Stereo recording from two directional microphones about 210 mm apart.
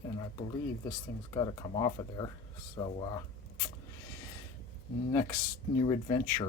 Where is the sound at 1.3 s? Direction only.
20° left (ahead or behind).